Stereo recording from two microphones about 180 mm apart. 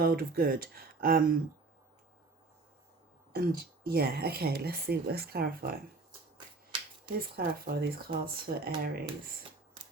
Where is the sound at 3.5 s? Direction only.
55° right (ahead or behind).